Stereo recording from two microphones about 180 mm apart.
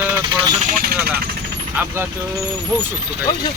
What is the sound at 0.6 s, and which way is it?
Vehicle, 50° right (ahead or behind).